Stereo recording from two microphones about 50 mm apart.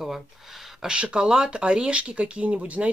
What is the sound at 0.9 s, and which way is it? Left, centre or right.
Speech, right.